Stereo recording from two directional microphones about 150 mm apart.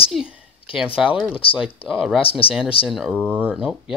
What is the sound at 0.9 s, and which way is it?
Speech, 5° right (ahead or behind).